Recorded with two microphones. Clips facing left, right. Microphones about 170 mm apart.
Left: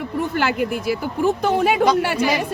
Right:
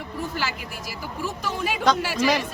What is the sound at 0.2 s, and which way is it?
Speech, 60° left (ahead or behind).